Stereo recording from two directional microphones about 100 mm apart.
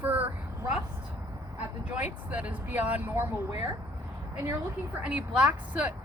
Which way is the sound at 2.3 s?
15° right (ahead or behind).